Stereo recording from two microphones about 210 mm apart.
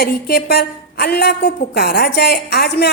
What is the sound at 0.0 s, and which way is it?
A woman's voice, 50° left (ahead or behind).